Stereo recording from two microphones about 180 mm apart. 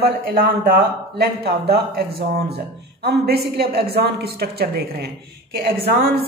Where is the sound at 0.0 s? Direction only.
55° right (ahead or behind).